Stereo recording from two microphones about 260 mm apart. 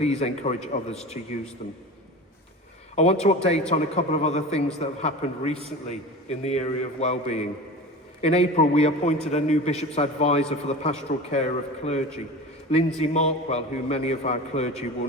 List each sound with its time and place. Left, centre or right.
0.0 s a man's voice: left
2.9 s a man's voice: left